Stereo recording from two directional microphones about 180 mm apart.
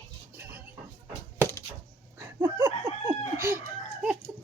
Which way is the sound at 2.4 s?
15° right (ahead or behind).